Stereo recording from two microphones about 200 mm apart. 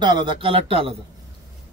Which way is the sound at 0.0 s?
25° right (ahead or behind).